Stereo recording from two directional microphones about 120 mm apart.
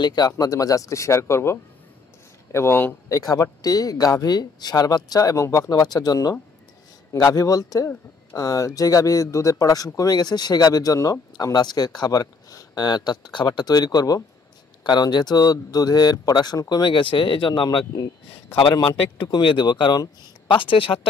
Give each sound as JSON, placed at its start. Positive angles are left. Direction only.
{"t": 0.0, "sound": "a man's voice", "side_deg": 35}